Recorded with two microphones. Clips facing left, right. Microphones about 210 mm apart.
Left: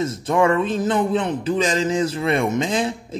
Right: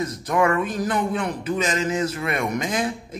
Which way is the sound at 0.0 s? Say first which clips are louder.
Left 3 dB; 25° left (ahead or behind).